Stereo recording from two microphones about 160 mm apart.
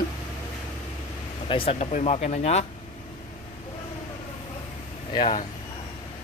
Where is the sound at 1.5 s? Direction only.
35° left (ahead or behind).